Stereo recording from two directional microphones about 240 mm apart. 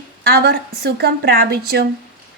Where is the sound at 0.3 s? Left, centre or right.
Right.